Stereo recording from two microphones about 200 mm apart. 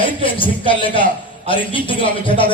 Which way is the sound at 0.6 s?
25° left (ahead or behind).